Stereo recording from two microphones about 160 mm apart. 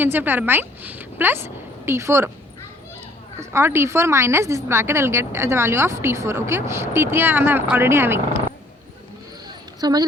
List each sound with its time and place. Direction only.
0.0 s a woman's voice: 10° right (ahead or behind)
3.5 s a woman's voice: 15° right (ahead or behind)
9.8 s a woman's voice: 25° right (ahead or behind)